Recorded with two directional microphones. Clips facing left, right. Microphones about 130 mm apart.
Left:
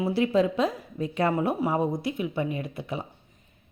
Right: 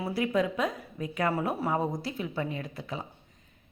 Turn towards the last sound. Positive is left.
turn(degrees=20)  # may be behind; listen again after turning